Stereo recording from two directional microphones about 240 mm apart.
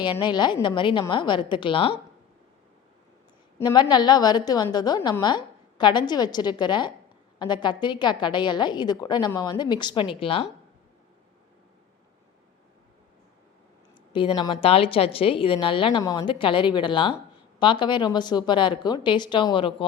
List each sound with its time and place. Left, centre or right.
0.0 s a woman's voice: centre
3.6 s a woman's voice: centre
14.1 s a woman's voice: centre